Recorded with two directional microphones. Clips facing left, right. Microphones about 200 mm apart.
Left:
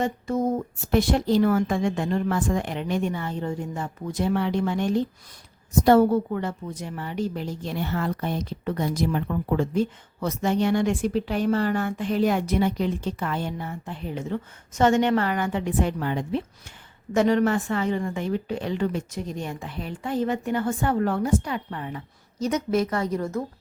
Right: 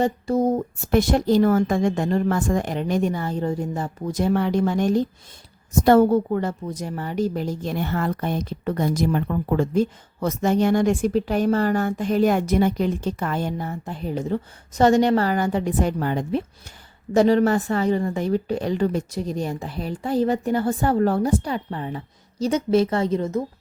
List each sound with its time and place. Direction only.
0.0 s a woman's voice: 35° right (ahead or behind)
0.9 s a woman's voice: 45° right (ahead or behind); by 23.4 s 20° right (ahead or behind)